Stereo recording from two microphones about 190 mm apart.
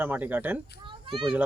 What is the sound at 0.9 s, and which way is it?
Children playing, 25° right (ahead or behind).